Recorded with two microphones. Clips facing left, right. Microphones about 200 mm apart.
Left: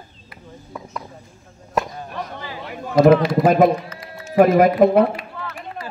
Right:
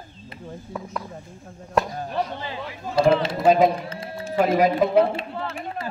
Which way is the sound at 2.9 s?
30° right (ahead or behind).